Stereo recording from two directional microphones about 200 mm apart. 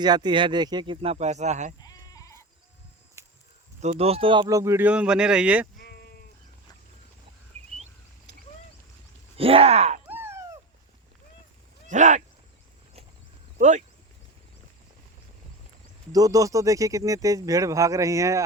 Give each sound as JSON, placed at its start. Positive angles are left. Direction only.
{"t": 0.0, "sound": "speech", "side_deg": -20}
{"t": 1.8, "sound": "sheep", "side_deg": 20}
{"t": 3.8, "sound": "speech", "side_deg": -30}
{"t": 5.8, "sound": "sheep", "side_deg": 55}
{"t": 9.4, "sound": "speech", "side_deg": -30}
{"t": 10.1, "sound": "dog", "side_deg": -10}
{"t": 11.9, "sound": "speech", "side_deg": -40}
{"t": 13.6, "sound": "speech", "side_deg": -35}
{"t": 16.1, "sound": "speech", "side_deg": -15}